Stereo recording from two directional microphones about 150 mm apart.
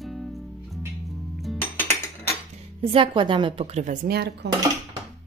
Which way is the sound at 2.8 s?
35° right (ahead or behind).